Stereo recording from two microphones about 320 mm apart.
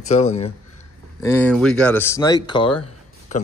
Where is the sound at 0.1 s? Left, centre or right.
Centre.